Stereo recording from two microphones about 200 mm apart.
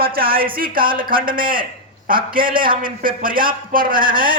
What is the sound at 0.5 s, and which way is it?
Speech, 45° right (ahead or behind).